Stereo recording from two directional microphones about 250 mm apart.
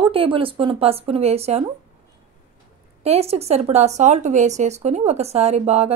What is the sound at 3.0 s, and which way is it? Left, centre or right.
Speech, right.